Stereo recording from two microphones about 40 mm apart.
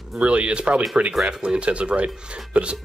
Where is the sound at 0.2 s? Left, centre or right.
Right.